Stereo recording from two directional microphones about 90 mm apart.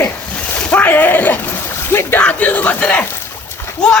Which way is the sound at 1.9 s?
25° left (ahead or behind).